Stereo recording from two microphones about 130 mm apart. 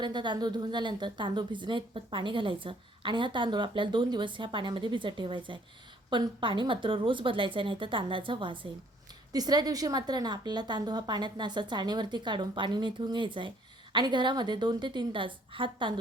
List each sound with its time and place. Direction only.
0.0 s a woman's voice: 35° right (ahead or behind)